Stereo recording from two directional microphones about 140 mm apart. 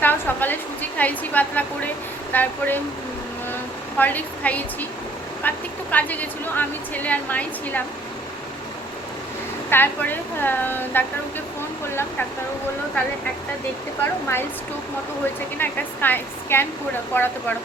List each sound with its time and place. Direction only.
0.0 s a sound: 15° left (ahead or behind)
2.3 s a woman's voice: 15° left (ahead or behind)
3.9 s a woman's voice: 10° left (ahead or behind)
9.6 s a woman's voice: 15° left (ahead or behind)
14.0 s a woman's voice: 15° left (ahead or behind)
15.5 s a woman's voice: 15° left (ahead or behind)